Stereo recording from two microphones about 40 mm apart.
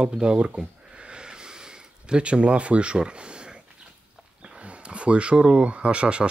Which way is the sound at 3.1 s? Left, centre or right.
Right.